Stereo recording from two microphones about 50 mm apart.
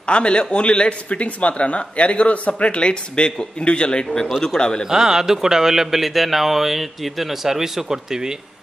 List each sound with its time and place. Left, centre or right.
0.0 s a man's voice: left
4.8 s a man's voice: centre